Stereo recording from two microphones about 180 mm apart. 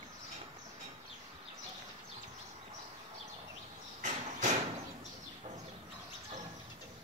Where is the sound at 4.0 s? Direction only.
40° right (ahead or behind).